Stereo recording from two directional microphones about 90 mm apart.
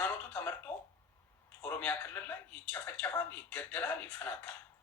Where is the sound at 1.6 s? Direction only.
20° left (ahead or behind).